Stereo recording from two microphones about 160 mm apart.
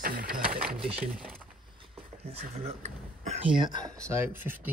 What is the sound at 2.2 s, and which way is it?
Speech, 40° right (ahead or behind).